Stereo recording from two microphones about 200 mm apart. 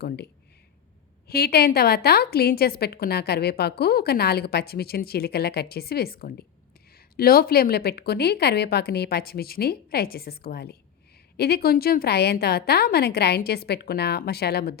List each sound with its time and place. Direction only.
1.3 s a woman's voice: 50° left (ahead or behind)